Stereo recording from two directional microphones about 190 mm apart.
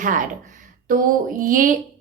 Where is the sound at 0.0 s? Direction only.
45° right (ahead or behind).